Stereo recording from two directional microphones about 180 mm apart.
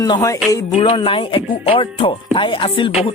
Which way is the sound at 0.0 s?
20° left (ahead or behind).